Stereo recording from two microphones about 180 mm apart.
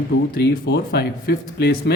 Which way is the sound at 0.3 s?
65° left (ahead or behind).